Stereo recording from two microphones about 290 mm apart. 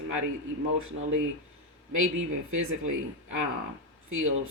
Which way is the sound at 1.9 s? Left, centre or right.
Right.